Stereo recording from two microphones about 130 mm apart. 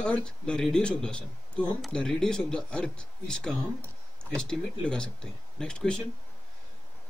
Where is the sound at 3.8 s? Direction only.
20° right (ahead or behind).